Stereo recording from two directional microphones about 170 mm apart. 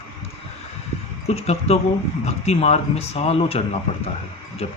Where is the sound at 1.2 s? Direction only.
40° left (ahead or behind).